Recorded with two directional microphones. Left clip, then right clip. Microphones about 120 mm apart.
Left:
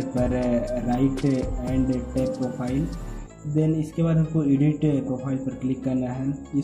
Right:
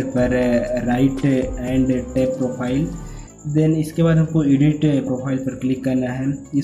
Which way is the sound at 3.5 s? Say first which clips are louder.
Right 6 dB; 25° left (ahead or behind).